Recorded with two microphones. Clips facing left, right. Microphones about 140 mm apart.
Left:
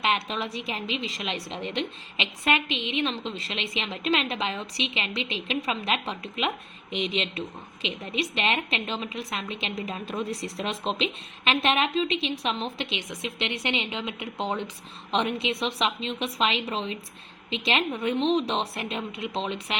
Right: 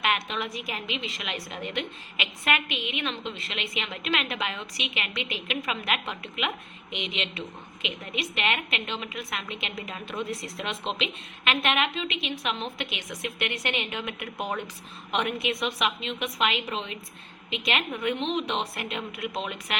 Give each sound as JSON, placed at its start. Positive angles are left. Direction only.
{"t": 0.0, "sound": "a woman's voice", "side_deg": 30}